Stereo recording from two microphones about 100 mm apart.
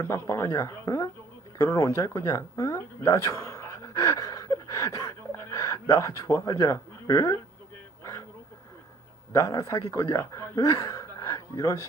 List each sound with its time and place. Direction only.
0.0 s a woman's voice: 30° left (ahead or behind)
9.3 s speech: 35° left (ahead or behind)